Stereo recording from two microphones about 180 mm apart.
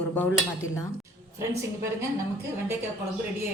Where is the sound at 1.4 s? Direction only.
15° right (ahead or behind).